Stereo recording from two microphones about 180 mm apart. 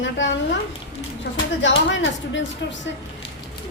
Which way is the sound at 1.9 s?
90° left.